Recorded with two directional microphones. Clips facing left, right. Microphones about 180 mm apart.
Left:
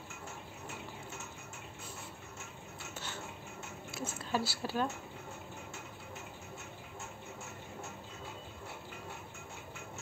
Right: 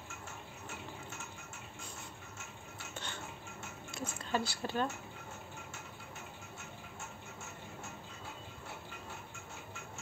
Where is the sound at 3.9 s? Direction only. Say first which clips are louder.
Even; 5° left (ahead or behind).